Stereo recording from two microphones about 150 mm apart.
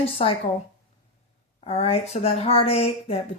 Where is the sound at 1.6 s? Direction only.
40° left (ahead or behind).